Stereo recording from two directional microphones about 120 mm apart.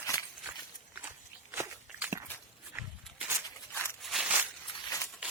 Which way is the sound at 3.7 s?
15° left (ahead or behind).